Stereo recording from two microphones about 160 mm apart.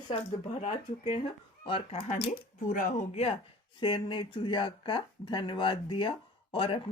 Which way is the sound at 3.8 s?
30° left (ahead or behind).